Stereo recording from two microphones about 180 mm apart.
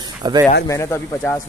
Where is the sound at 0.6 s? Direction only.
15° left (ahead or behind).